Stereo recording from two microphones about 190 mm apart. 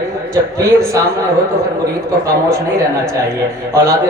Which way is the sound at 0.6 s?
15° right (ahead or behind).